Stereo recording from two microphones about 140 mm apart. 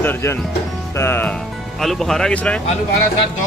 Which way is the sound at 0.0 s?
15° left (ahead or behind).